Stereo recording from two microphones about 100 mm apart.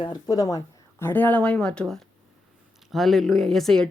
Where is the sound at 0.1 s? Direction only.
35° left (ahead or behind).